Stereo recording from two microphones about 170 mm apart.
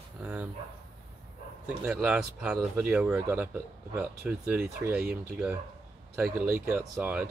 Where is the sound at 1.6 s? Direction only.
5° right (ahead or behind).